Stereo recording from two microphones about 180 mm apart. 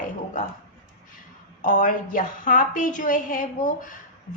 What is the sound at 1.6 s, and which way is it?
A woman's voice, 50° left (ahead or behind).